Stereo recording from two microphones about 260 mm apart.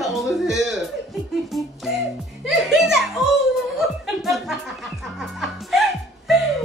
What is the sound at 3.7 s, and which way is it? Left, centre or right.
Music, centre.